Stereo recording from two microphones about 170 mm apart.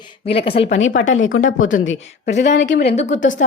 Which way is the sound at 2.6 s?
85° left.